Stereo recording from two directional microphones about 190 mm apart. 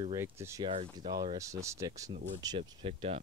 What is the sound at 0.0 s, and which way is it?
Speech, 15° right (ahead or behind).